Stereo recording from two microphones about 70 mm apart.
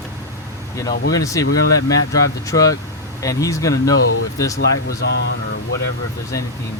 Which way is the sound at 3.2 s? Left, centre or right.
Left.